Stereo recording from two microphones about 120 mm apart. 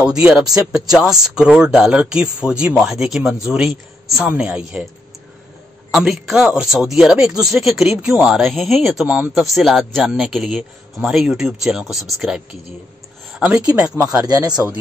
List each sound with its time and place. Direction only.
0.0 s speech: 5° right (ahead or behind)
5.9 s speech: 5° right (ahead or behind)
13.4 s speech: 10° right (ahead or behind)
14.2 s a man's voice: 35° right (ahead or behind)